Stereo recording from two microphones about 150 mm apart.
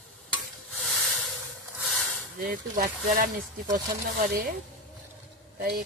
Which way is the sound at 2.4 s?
70° right (ahead or behind).